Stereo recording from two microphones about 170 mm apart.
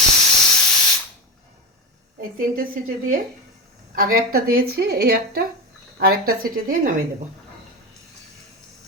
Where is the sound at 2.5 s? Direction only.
55° right (ahead or behind).